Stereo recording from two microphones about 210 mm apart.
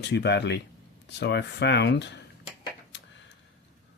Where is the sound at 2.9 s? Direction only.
55° left (ahead or behind).